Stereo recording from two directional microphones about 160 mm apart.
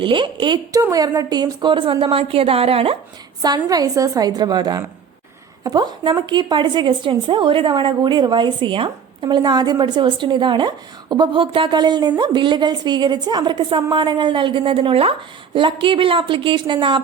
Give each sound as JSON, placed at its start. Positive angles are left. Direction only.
{"t": 0.0, "sound": "speech", "side_deg": -30}
{"t": 3.4, "sound": "a woman's voice", "side_deg": -25}